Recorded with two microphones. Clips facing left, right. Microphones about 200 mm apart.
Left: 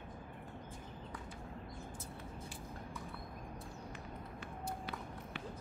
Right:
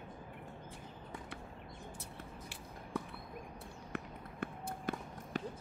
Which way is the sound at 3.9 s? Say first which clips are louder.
Right 3 dB; 55° right (ahead or behind).